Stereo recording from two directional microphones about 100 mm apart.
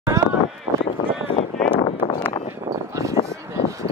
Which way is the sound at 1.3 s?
60° left (ahead or behind).